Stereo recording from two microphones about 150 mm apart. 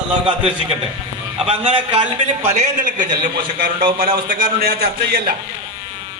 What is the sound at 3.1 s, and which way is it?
A man's voice, 75° right (ahead or behind).